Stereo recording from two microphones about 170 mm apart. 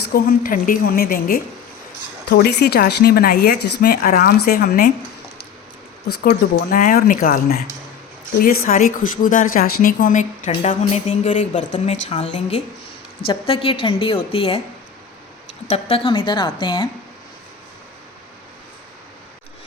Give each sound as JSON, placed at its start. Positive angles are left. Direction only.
{"t": 0.1, "sound": "speech", "side_deg": 60}
{"t": 2.3, "sound": "speech", "side_deg": 70}
{"t": 6.2, "sound": "speech", "side_deg": 55}
{"t": 12.0, "sound": "a woman's voice", "side_deg": 35}
{"t": 15.7, "sound": "a woman's voice", "side_deg": 35}